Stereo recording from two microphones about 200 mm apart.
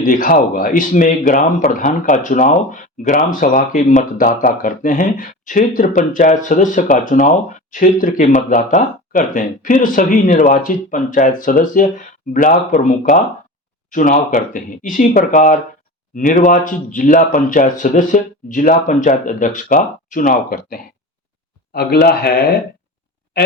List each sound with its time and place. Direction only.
0.0 s speech: 45° left (ahead or behind)